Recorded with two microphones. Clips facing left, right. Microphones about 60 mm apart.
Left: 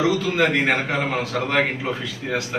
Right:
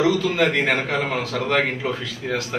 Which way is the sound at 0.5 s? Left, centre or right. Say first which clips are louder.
Even; centre.